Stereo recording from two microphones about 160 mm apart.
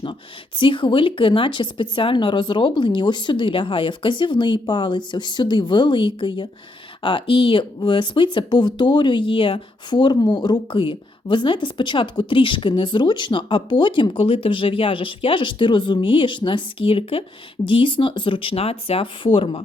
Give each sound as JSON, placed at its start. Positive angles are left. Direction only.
{"t": 0.6, "sound": "speech", "side_deg": 30}